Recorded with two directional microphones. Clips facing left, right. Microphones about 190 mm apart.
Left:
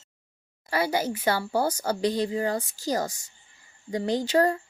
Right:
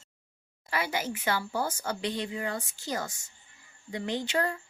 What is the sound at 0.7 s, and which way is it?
Speech, 35° left (ahead or behind).